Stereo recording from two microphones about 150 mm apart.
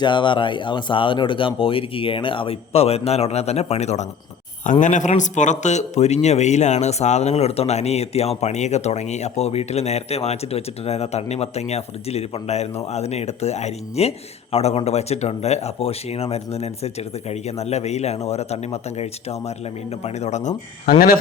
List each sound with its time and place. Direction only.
0.0 s speech: 30° left (ahead or behind); by 4.0 s 45° left (ahead or behind)
4.6 s a man's voice: 55° left (ahead or behind)